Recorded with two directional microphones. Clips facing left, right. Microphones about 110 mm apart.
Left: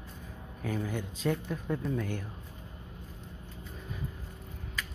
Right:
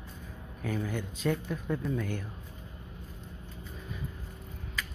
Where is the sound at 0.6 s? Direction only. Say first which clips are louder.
Even; 30° left (ahead or behind).